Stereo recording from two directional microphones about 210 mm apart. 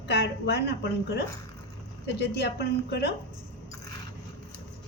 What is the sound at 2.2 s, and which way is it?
Speech, 50° left (ahead or behind).